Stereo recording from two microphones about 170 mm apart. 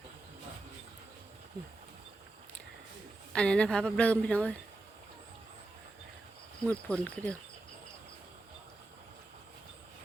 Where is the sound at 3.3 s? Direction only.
5° left (ahead or behind).